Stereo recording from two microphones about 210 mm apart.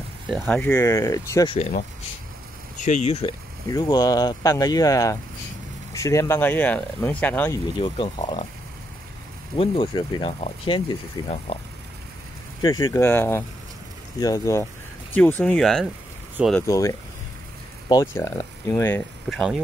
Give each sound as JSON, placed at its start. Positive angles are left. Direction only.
{"t": 0.3, "sound": "speech", "side_deg": 5}
{"t": 0.7, "sound": "speech", "side_deg": 15}
{"t": 1.5, "sound": "speech", "side_deg": 35}
{"t": 3.6, "sound": "speech", "side_deg": 20}
{"t": 7.8, "sound": "speech", "side_deg": 25}
{"t": 9.6, "sound": "speech", "side_deg": 25}
{"t": 12.6, "sound": "speech", "side_deg": 15}
{"t": 16.5, "sound": "speech", "side_deg": 15}